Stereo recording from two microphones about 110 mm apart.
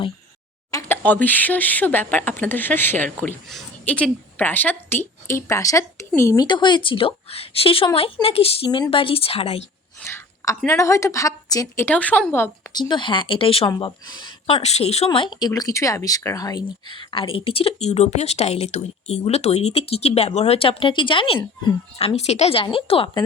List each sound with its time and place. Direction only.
0.7 s a sound: 30° left (ahead or behind)
1.0 s a woman's voice: 15° left (ahead or behind)
6.4 s speech: 45° left (ahead or behind); by 9.6 s 65° left (ahead or behind)
10.0 s whispering: 20° left (ahead or behind)
10.7 s a woman's voice: 25° left (ahead or behind)
11.9 s speech: 15° left (ahead or behind)
12.7 s speech: 45° left (ahead or behind)
14.1 s speech: 40° left (ahead or behind)
14.4 s speech: 70° left (ahead or behind); by 22.0 s 50° left (ahead or behind)
22.0 s speech: 75° left (ahead or behind); by 23.2 s 55° left (ahead or behind)